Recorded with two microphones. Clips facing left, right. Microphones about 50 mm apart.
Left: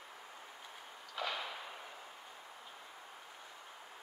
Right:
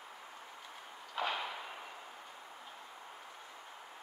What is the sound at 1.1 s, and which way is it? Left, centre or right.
Whip, right.